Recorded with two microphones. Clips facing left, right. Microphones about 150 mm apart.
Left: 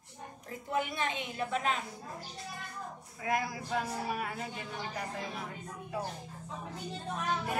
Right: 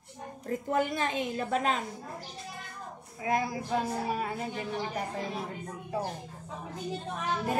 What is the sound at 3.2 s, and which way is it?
A woman's voice, 25° right (ahead or behind).